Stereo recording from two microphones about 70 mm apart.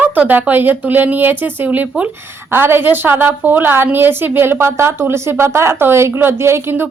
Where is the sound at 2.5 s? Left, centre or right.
Right.